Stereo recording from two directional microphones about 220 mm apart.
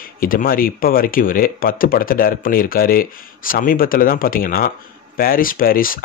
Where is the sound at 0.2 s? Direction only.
40° left (ahead or behind).